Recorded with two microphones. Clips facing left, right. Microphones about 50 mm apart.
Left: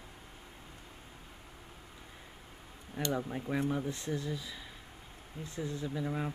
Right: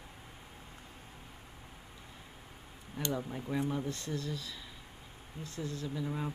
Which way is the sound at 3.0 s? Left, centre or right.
Centre.